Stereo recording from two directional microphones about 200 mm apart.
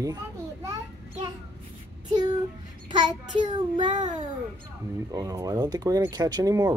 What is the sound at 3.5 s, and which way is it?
Child singing, 25° right (ahead or behind).